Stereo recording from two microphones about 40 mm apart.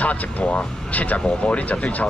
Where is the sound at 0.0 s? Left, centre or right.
Left.